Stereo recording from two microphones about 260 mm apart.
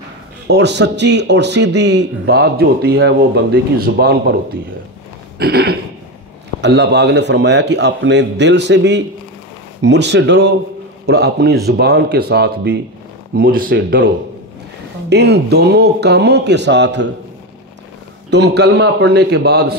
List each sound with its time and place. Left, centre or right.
0.5 s a man's voice: right
5.4 s a man's voice: right
18.3 s a man's voice: right